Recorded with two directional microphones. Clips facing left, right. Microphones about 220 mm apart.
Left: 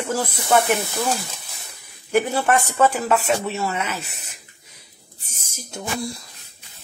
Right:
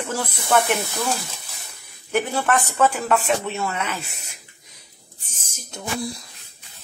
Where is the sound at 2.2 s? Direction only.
10° left (ahead or behind).